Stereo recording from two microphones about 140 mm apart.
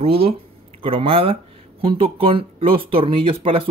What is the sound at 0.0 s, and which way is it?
Speech, 40° right (ahead or behind).